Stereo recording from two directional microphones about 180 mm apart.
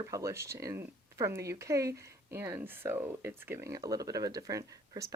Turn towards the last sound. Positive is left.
turn(degrees=-20)  # may be behind; listen again after turning